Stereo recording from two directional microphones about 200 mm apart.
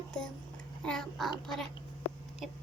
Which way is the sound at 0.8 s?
5° left (ahead or behind).